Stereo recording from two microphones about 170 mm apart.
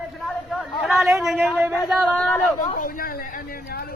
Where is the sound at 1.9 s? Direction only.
Centre (ahead or behind).